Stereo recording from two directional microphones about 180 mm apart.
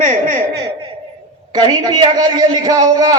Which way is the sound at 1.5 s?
20° right (ahead or behind).